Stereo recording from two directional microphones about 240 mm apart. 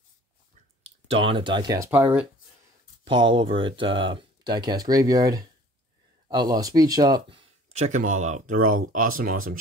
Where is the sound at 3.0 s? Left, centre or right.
Right.